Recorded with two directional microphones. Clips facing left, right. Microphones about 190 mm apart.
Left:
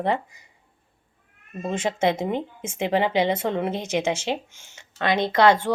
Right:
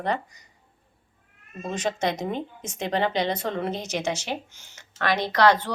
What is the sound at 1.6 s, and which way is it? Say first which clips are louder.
Speech: left 4 dB; 25° left (ahead or behind).